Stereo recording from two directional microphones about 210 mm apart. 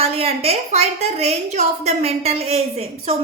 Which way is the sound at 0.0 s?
30° right (ahead or behind).